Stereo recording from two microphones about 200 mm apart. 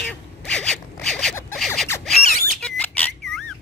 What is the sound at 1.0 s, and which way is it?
Zipper, 5° left (ahead or behind).